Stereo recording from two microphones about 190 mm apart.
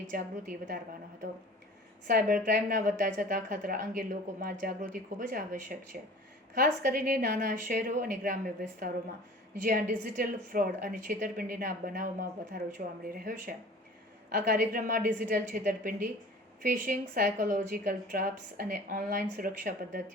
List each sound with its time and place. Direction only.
0.1 s a woman's voice: 45° right (ahead or behind)
2.0 s a woman's voice: 50° right (ahead or behind)
9.6 s a woman's voice: 45° right (ahead or behind)